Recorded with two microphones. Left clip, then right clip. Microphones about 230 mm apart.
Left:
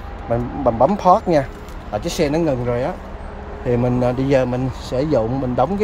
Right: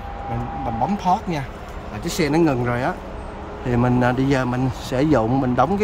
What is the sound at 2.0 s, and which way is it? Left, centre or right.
A man's voice, centre.